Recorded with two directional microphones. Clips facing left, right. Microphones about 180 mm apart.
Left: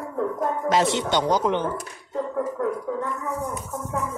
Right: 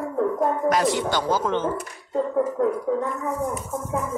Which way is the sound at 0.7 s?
25° left (ahead or behind).